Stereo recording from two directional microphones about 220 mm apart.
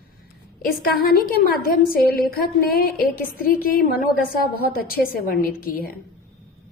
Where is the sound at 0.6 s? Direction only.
45° left (ahead or behind).